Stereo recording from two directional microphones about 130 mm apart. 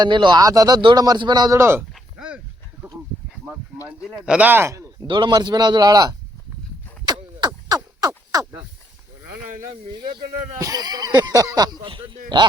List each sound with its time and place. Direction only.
0.0 s a man's voice: 35° right (ahead or behind)
1.5 s speech: 20° right (ahead or behind)
1.9 s a sound: 5° right (ahead or behind)
4.0 s speech: 5° right (ahead or behind); by 4.9 s 20° right (ahead or behind)
5.0 s a man's voice: 35° right (ahead or behind)
7.0 s a sound: 30° right (ahead or behind)
10.6 s a man's voice: 30° right (ahead or behind)